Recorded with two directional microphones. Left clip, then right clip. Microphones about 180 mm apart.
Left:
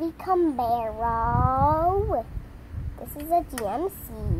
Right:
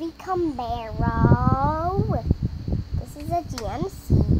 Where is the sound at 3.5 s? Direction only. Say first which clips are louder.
Left 2 dB; 10° right (ahead or behind).